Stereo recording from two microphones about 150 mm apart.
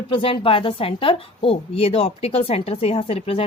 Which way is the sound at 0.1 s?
35° left (ahead or behind).